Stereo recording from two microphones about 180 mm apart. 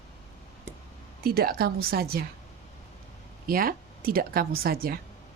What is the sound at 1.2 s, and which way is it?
Speech, 55° right (ahead or behind).